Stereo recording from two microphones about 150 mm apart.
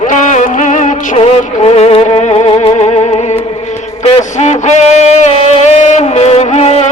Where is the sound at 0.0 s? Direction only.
55° left (ahead or behind).